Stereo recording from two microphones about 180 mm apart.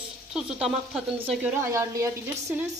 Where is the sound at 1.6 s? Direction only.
15° right (ahead or behind).